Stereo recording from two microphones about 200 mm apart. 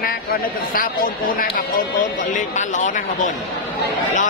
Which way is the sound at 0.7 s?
45° left (ahead or behind).